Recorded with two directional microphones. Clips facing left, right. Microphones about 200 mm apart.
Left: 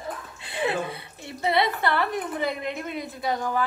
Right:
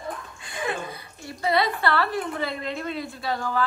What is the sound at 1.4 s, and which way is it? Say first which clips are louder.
A woman's voice: even; 25° left (ahead or behind).